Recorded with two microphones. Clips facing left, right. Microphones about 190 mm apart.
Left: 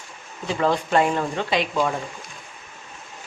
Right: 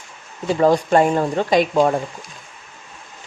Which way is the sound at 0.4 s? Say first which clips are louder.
Right 6 dB; 40° right (ahead or behind).